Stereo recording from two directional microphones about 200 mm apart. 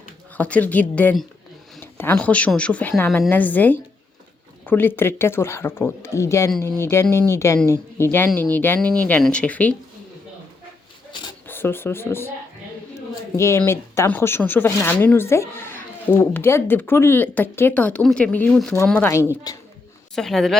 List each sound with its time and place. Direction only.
0.3 s speech: 5° left (ahead or behind)
11.4 s speech: 10° left (ahead or behind)
13.3 s speech: 15° left (ahead or behind)
20.1 s speech: centre (ahead or behind)